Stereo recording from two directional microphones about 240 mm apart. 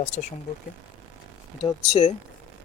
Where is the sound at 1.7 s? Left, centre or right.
Left.